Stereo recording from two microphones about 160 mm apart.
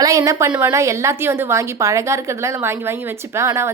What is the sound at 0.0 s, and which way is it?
A woman's voice, 20° right (ahead or behind).